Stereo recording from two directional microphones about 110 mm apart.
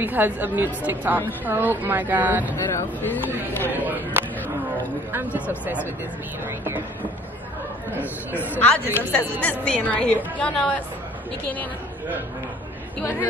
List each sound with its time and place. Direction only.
0.0 s speech: 15° right (ahead or behind)
2.5 s speech: 20° left (ahead or behind)
3.7 s speech: 15° right (ahead or behind)
8.4 s a woman's voice: 10° left (ahead or behind)
8.8 s speech: 20° right (ahead or behind)
9.4 s a woman's voice: 10° left (ahead or behind)